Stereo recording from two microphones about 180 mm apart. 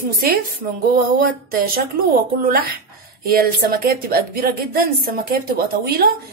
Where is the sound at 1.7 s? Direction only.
55° right (ahead or behind).